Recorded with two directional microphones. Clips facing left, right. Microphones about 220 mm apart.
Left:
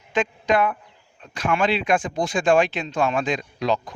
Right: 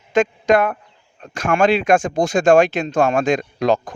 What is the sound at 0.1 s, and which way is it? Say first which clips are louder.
A man's voice: right 6 dB; 45° right (ahead or behind).